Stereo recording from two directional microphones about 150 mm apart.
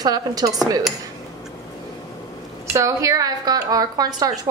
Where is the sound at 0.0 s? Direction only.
25° right (ahead or behind).